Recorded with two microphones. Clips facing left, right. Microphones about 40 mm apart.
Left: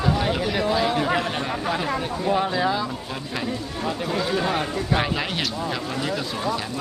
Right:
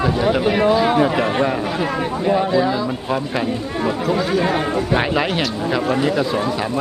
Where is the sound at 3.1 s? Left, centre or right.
Right.